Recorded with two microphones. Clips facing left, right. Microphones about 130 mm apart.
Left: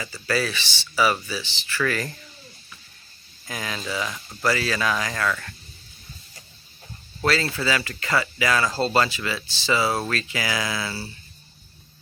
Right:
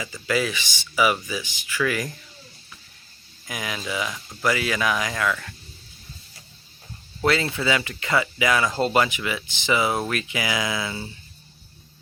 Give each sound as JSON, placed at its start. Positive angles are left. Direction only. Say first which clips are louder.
{"t": 0.0, "sound": "speech", "louder": "right 1 dB", "side_deg": -15}
{"t": 3.4, "sound": "speech", "louder": "even", "side_deg": -15}
{"t": 4.1, "sound": "speech", "louder": "even", "side_deg": 0}
{"t": 4.4, "sound": "speech", "louder": "even", "side_deg": -15}
{"t": 7.2, "sound": "speech", "louder": "right 1 dB", "side_deg": -20}